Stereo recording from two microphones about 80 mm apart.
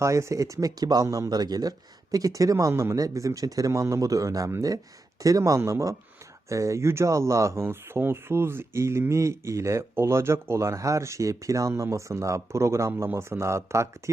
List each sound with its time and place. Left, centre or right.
0.0 s speech: right
1.4 s speech: right